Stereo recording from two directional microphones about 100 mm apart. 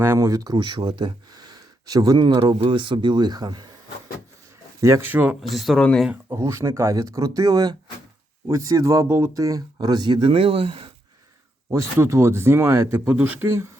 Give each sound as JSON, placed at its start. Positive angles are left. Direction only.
{"t": 0.0, "sound": "speech", "side_deg": -30}
{"t": 0.5, "sound": "speech", "side_deg": -55}
{"t": 4.8, "sound": "speech", "side_deg": -30}
{"t": 5.0, "sound": "speech", "side_deg": -20}
{"t": 5.4, "sound": "speech", "side_deg": 0}
{"t": 5.8, "sound": "speech", "side_deg": 10}
{"t": 6.2, "sound": "speech", "side_deg": -25}
{"t": 9.0, "sound": "speech", "side_deg": -25}
{"t": 9.3, "sound": "speech", "side_deg": -35}
{"t": 11.7, "sound": "speech", "side_deg": -30}